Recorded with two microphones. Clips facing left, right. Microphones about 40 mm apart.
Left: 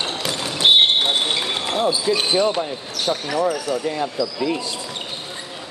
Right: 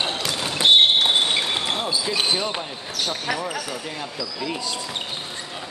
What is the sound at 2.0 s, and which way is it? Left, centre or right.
Speech, centre.